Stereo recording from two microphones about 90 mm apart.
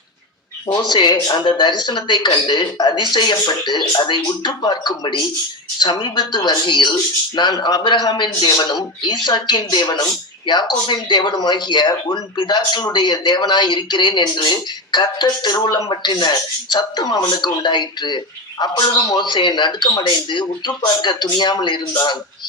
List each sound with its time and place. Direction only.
0.7 s a man's voice: 55° left (ahead or behind)